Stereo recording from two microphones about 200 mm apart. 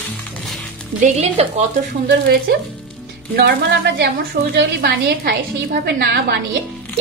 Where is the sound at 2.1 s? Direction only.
50° right (ahead or behind).